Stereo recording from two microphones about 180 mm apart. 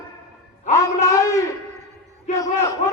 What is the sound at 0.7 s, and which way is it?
Music, 15° left (ahead or behind).